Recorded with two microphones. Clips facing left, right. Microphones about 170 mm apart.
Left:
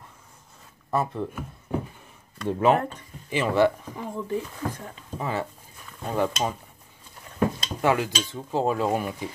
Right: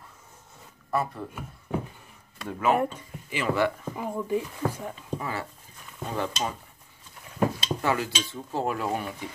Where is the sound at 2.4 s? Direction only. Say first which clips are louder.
Left 3 dB; 30° left (ahead or behind).